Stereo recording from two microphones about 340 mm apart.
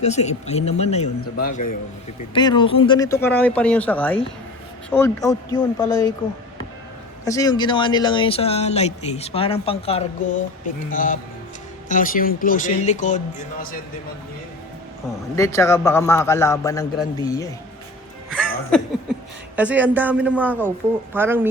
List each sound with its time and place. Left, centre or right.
0.0 s speech: centre
2.3 s speech: centre
7.3 s speech: centre
15.4 s speech: centre
18.3 s music: centre
19.5 s speech: centre